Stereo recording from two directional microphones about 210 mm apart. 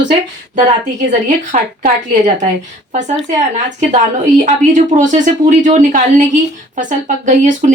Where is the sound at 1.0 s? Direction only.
35° right (ahead or behind).